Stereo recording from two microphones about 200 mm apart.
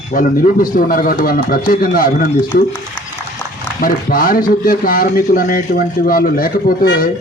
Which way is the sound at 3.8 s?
45° left (ahead or behind).